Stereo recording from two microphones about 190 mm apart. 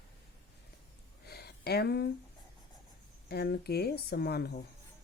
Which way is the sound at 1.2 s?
55° left (ahead or behind).